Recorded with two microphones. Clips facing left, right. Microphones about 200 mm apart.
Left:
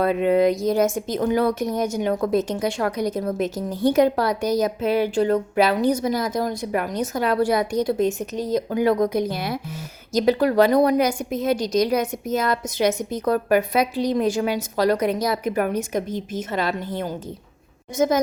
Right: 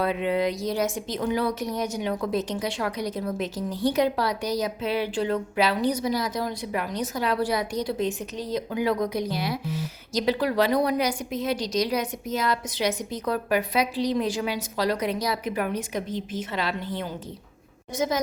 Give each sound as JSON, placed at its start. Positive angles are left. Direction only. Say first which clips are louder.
{"t": 0.0, "sound": "speech", "louder": "left 6 dB", "side_deg": 45}